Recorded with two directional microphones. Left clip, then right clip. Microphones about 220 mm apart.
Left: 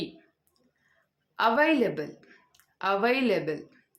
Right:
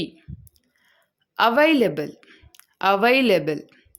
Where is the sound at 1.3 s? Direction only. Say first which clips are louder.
Right 6 dB; 40° right (ahead or behind).